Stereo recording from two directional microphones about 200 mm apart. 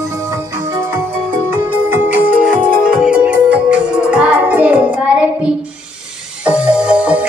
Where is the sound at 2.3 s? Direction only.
45° right (ahead or behind).